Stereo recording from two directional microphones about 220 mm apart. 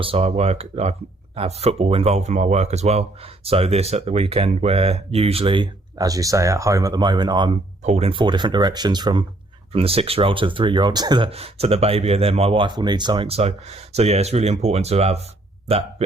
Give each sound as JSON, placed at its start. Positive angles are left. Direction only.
{"t": 0.0, "sound": "speech", "side_deg": -25}